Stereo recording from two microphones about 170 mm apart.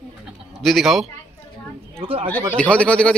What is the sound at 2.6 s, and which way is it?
Speech, 5° left (ahead or behind).